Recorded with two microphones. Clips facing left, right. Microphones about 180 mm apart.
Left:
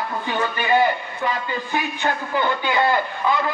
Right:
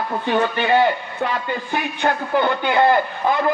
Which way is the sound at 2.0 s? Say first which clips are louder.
Right 6 dB; 60° right (ahead or behind).